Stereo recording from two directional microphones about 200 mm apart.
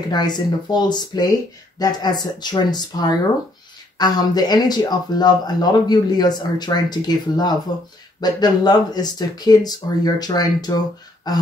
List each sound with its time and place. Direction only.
0.1 s speech: 20° left (ahead or behind)